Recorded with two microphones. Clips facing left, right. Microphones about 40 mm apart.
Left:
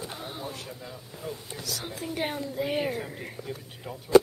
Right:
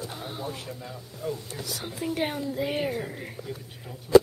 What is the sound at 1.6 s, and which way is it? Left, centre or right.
Speech, centre.